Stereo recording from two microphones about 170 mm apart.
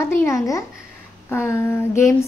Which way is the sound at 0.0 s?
15° left (ahead or behind).